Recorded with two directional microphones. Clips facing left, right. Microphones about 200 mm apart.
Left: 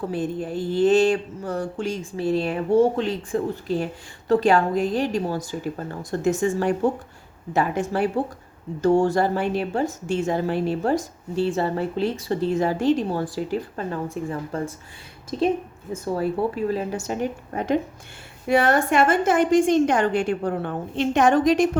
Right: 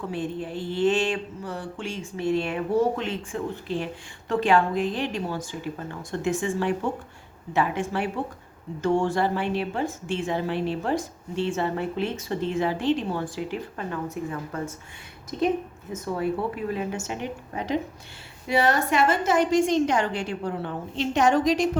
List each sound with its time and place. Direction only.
0.1 s a woman's voice: 40° left (ahead or behind)